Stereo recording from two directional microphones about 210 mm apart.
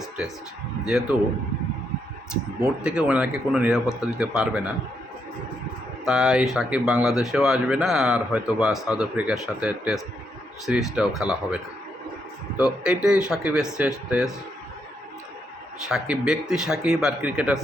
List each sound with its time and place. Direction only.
0.9 s speech: 5° right (ahead or behind)
2.6 s speech: 10° right (ahead or behind)
6.1 s speech: centre (ahead or behind)
12.5 s speech: 5° right (ahead or behind)
15.9 s speech: centre (ahead or behind)